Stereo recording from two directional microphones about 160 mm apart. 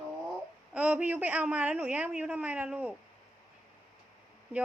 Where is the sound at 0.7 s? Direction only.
5° right (ahead or behind).